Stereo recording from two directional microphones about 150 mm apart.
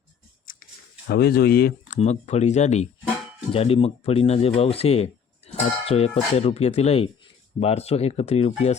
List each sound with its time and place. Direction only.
1.0 s speech: 90° left
2.0 s speech: 45° left (ahead or behind)